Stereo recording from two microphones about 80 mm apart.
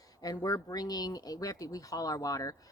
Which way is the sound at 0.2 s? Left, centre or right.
Left.